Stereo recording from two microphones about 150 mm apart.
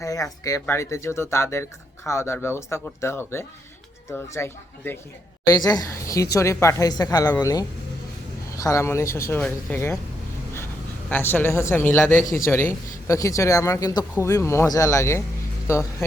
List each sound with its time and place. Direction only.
0.0 s speech: 20° left (ahead or behind)
5.5 s speech: 25° left (ahead or behind)
11.1 s speech: 15° left (ahead or behind)
12.2 s a man's voice: 60° left (ahead or behind)
12.5 s speech: 15° left (ahead or behind)